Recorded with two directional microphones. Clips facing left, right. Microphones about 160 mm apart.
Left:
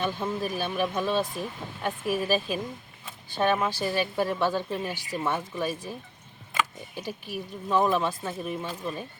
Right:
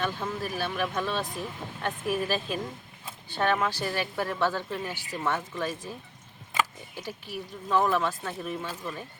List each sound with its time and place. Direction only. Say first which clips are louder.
0.0 s speech: left 2 dB; 15° left (ahead or behind)
6.9 s speech: left 2 dB; 15° left (ahead or behind)